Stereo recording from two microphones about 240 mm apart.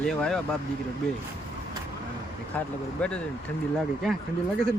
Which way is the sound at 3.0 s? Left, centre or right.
Centre.